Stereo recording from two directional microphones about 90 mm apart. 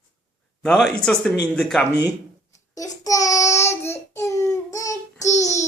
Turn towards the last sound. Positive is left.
turn(degrees=35)  # may be behind; listen again after turning